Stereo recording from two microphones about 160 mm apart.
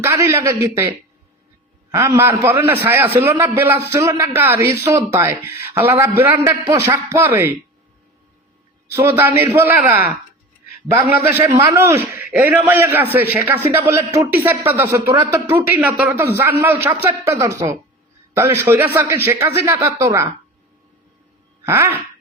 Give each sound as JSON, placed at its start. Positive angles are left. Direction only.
{"t": 0.0, "sound": "a man's voice", "side_deg": -15}
{"t": 8.9, "sound": "a man's voice", "side_deg": -15}
{"t": 11.1, "sound": "a man's voice", "side_deg": -10}
{"t": 21.6, "sound": "a sound", "side_deg": -15}